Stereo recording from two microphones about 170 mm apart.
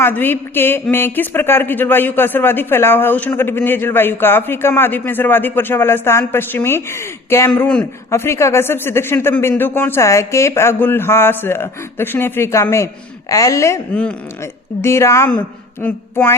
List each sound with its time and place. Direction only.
0.0 s speech: 10° left (ahead or behind)